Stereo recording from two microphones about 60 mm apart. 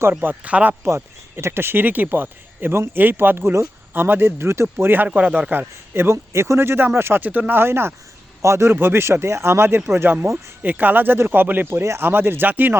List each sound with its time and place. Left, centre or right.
0.0 s a man's voice: right
0.9 s a man's voice: right
3.9 s a man's voice: right
5.0 s a man's voice: right
7.3 s speech: right
7.6 s a man's voice: right
11.8 s speech: right
12.0 s a man's voice: right